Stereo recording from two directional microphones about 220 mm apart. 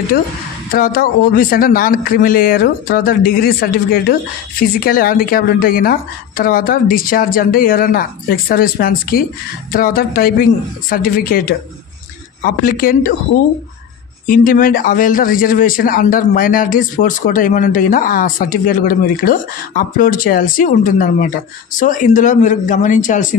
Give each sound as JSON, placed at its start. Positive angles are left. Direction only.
{"t": 0.7, "sound": "speech", "side_deg": 40}
{"t": 14.2, "sound": "speech", "side_deg": 40}